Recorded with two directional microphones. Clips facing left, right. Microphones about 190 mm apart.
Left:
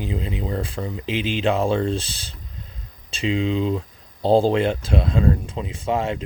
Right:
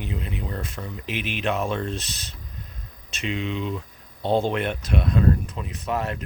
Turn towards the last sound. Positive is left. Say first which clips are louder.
# left 4 dB
turn(degrees=25)  # may be behind; listen again after turning